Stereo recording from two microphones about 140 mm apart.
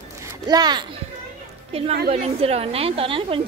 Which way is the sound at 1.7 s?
45° right (ahead or behind).